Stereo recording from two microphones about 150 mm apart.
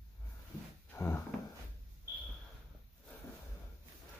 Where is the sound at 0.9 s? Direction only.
15° left (ahead or behind).